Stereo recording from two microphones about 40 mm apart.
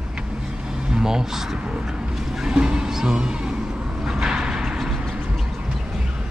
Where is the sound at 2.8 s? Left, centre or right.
Centre.